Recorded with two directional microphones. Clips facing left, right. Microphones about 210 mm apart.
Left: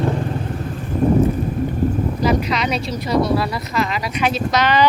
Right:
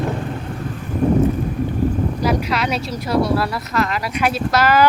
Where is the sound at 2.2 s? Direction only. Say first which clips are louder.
Left 2 dB; 5° right (ahead or behind).